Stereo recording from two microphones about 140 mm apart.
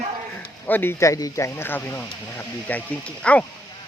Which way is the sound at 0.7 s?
15° left (ahead or behind).